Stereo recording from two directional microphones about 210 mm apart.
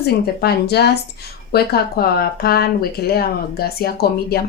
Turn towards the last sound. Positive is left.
turn(degrees=45)  # may be behind; listen again after turning